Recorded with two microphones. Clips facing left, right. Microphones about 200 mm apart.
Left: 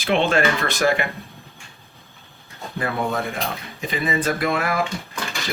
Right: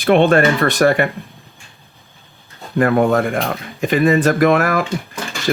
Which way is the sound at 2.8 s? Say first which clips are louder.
Right 10 dB; 60° right (ahead or behind).